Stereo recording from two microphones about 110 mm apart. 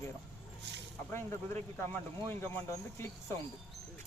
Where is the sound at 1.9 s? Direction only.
20° left (ahead or behind).